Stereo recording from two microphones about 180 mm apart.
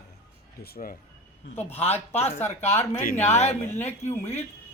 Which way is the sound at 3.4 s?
40° left (ahead or behind).